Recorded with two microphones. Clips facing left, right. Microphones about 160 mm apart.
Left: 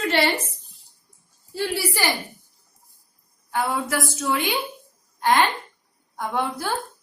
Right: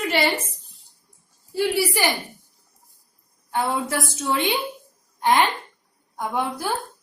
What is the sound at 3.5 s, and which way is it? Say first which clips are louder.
A woman's voice: right 1 dB; 25° right (ahead or behind).